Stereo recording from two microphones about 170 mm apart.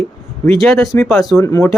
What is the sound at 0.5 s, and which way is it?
Bell, centre (ahead or behind).